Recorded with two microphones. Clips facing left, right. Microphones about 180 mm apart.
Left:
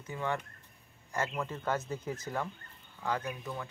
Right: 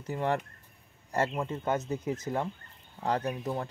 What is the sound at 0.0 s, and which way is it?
Speech, 35° right (ahead or behind).